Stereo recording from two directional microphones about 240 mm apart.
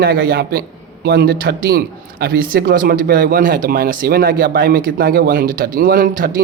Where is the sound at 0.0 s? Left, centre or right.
Right.